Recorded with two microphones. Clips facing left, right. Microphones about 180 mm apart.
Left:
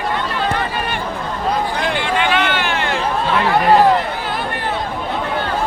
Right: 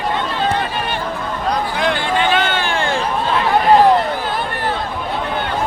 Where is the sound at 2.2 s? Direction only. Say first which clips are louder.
Even; 35° right (ahead or behind).